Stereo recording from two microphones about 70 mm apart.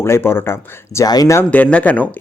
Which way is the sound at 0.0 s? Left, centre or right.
Left.